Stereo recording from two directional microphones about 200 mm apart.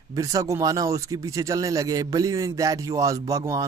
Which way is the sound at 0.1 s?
15° right (ahead or behind).